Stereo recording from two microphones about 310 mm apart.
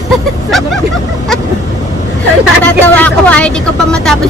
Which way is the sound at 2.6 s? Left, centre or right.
Centre.